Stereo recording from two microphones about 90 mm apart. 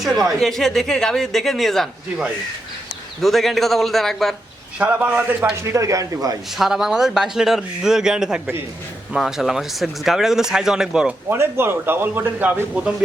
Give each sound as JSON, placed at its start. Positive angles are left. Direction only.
{"t": 0.2, "sound": "speech", "side_deg": 0}
{"t": 4.8, "sound": "a man's voice", "side_deg": -15}
{"t": 5.6, "sound": "speech", "side_deg": -35}
{"t": 6.6, "sound": "speech", "side_deg": -5}
{"t": 11.3, "sound": "a man's voice", "side_deg": -25}